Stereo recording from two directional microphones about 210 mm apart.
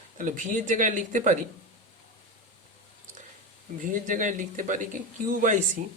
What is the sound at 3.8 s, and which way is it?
Speech, 40° right (ahead or behind).